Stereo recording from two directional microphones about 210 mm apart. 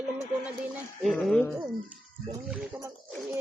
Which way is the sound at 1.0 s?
5° left (ahead or behind).